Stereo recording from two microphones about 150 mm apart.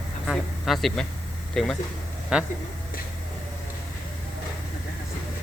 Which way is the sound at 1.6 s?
5° left (ahead or behind).